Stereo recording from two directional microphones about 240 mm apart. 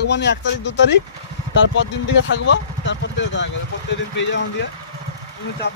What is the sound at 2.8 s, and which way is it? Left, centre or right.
Vehicle, left.